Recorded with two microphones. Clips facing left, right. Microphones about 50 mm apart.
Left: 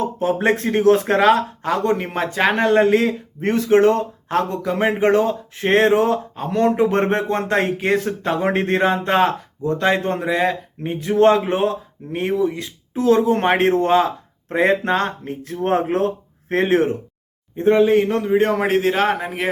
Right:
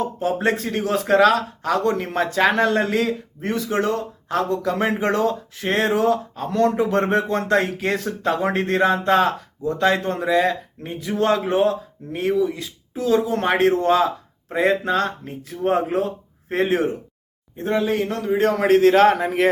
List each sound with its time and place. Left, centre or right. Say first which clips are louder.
0.0 s a sound: left 2 dB; left
0.5 s speech: left 7 dB; left
2.1 s a man's voice: even; centre
2.8 s speech: left 6 dB; left
3.4 s speech: left 8 dB; left
4.6 s speech: left 3 dB; centre
5.5 s speech: left 7 dB; left
15.4 s speech: left 1 dB; left
17.6 s a man's voice: left 7 dB; left; by 19.5 s centre